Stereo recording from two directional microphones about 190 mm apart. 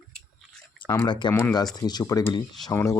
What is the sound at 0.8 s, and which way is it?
Speech, 25° left (ahead or behind).